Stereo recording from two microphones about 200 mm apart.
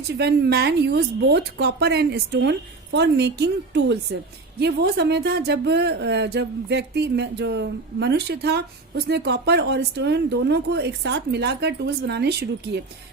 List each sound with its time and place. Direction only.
0.1 s speech: 55° right (ahead or behind)